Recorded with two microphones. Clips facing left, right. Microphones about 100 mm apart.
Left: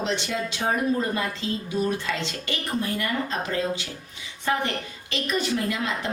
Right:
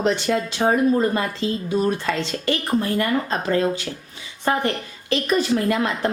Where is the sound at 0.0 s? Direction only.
50° right (ahead or behind).